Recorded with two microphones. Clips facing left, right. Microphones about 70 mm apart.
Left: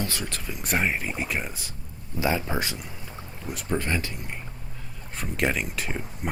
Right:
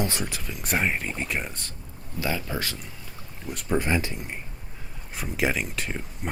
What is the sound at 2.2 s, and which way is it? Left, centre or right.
Speech, left.